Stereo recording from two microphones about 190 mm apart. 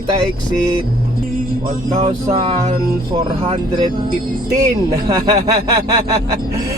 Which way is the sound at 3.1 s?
25° right (ahead or behind).